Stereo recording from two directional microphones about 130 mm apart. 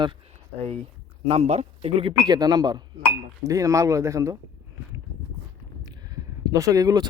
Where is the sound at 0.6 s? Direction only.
50° right (ahead or behind).